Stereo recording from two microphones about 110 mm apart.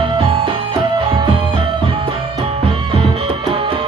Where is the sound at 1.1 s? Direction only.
45° right (ahead or behind).